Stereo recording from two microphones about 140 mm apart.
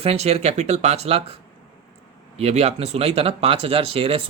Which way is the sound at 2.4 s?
50° right (ahead or behind).